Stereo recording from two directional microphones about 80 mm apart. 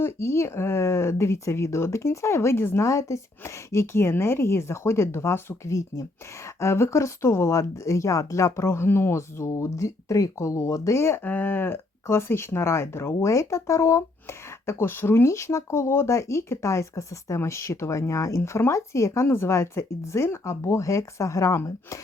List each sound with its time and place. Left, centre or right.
0.0 s speech: left
11.2 s speech: left